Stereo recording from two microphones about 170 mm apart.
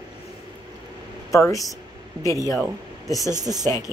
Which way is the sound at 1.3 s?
20° left (ahead or behind).